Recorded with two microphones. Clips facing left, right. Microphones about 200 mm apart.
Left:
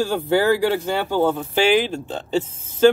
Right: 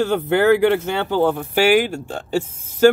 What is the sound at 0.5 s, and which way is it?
Speech, 20° right (ahead or behind).